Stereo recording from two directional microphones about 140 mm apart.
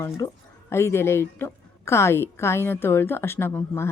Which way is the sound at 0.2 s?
20° left (ahead or behind).